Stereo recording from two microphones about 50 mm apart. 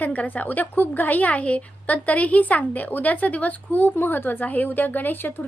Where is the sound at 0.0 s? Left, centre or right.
Left.